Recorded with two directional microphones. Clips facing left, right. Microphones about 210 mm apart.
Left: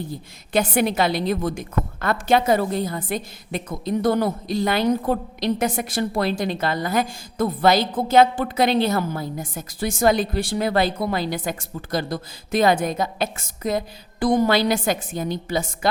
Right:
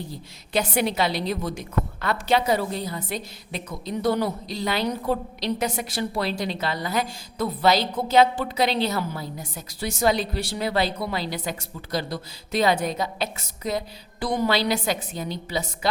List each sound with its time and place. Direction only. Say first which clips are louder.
0.1 s a woman's voice: left 4 dB; 50° left (ahead or behind)